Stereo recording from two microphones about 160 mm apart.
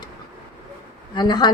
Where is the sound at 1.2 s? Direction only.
25° left (ahead or behind).